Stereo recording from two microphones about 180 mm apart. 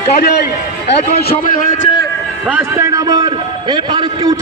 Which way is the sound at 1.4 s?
50° left (ahead or behind).